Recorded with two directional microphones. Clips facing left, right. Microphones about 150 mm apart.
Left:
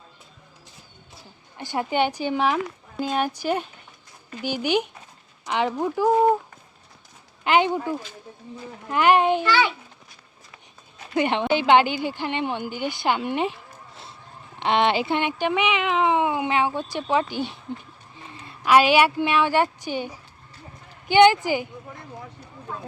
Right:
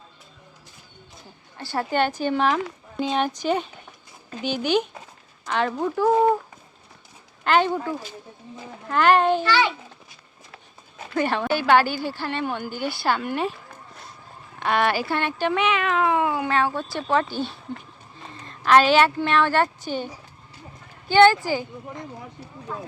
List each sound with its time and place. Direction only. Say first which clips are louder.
1.5 s speech: even; 15° left (ahead or behind)
7.4 s speech: even; 15° left (ahead or behind)
11.1 s a woman's voice: left 1 dB; 20° left (ahead or behind)
14.6 s a woman's voice: left 1 dB; 20° left (ahead or behind)
21.1 s speech: even; 15° left (ahead or behind)